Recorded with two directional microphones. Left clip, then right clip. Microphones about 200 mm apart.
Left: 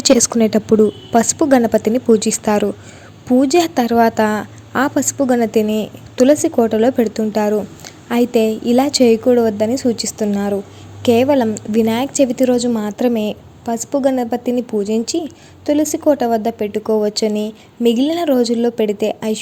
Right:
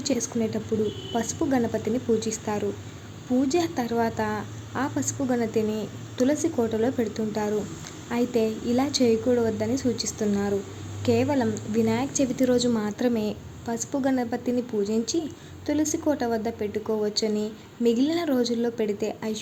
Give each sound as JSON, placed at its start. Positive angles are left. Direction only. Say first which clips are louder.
{"t": 0.0, "sound": "a woman's voice", "louder": "left 14 dB", "side_deg": 45}